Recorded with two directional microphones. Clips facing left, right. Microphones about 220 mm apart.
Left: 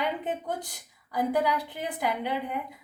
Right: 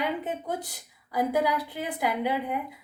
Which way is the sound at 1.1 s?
10° right (ahead or behind).